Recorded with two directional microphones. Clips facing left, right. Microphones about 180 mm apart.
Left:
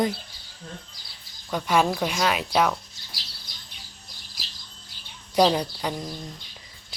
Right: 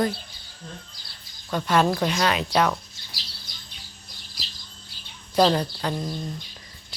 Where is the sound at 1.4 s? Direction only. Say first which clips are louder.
Right 1 dB; 10° left (ahead or behind).